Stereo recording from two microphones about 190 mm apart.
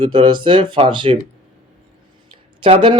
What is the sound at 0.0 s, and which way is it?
Speech, 25° right (ahead or behind).